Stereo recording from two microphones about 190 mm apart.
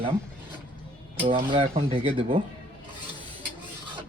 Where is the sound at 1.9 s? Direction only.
30° right (ahead or behind).